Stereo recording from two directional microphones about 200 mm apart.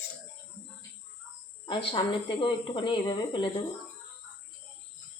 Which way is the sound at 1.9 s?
20° left (ahead or behind).